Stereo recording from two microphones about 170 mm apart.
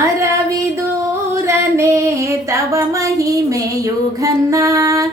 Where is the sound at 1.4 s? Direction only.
15° right (ahead or behind).